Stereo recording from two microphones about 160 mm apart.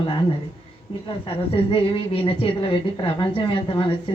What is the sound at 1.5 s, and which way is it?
Speech, 35° left (ahead or behind).